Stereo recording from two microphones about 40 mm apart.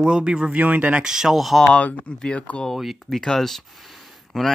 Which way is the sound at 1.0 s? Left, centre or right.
Centre.